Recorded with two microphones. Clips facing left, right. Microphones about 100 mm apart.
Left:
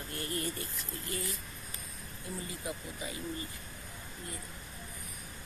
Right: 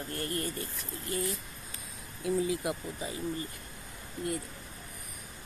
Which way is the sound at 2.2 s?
90° right.